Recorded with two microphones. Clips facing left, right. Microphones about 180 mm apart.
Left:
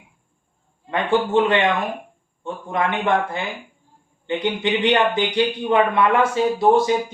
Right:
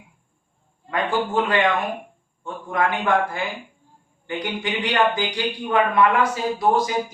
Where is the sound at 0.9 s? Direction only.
25° left (ahead or behind).